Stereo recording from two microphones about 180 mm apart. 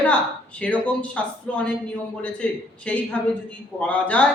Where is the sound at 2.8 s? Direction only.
5° left (ahead or behind).